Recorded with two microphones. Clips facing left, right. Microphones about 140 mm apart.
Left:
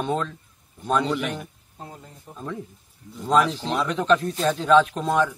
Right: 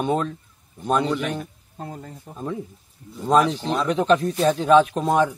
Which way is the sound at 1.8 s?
55° right (ahead or behind).